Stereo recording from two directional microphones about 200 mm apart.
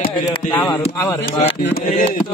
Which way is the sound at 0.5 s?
10° left (ahead or behind).